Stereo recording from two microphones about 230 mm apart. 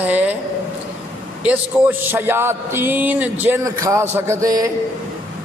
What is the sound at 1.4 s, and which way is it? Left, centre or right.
A man's voice, centre.